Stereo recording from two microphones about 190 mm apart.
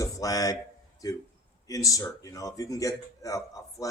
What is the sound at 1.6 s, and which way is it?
Speech, 20° left (ahead or behind).